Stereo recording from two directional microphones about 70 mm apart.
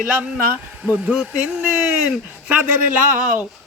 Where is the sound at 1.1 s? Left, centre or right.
Centre.